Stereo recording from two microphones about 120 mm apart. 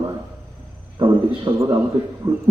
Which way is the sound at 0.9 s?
40° right (ahead or behind).